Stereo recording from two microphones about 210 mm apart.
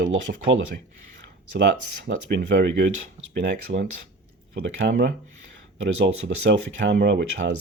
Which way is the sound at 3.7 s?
40° right (ahead or behind).